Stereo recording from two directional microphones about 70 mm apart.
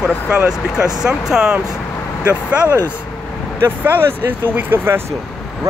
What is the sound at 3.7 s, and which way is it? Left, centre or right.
Speech, right.